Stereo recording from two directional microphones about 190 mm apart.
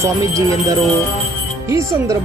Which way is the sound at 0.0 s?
15° right (ahead or behind).